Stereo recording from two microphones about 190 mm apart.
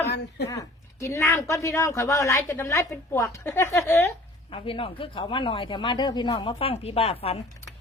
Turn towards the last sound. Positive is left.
turn(degrees=30)  # may be behind; listen again after turning